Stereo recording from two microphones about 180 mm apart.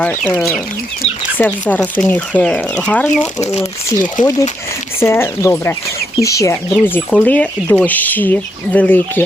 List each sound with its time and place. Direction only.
1.4 s speech: 10° left (ahead or behind)